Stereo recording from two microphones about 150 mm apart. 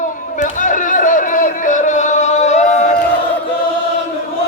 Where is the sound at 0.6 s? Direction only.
60° left (ahead or behind).